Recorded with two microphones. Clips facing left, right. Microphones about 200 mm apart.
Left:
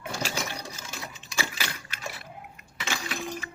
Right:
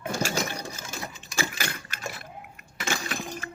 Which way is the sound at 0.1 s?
45° right (ahead or behind).